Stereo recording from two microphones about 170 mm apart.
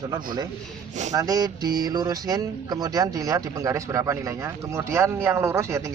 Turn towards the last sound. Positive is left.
turn(degrees=-15)  # may be behind; listen again after turning